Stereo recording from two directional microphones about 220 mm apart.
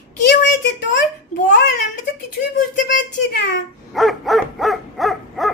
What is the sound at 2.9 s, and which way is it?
Speech, 40° left (ahead or behind).